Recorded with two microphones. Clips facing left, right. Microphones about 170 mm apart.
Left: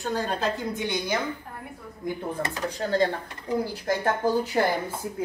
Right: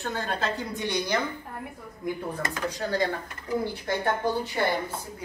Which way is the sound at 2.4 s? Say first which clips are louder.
Even; 30° left (ahead or behind).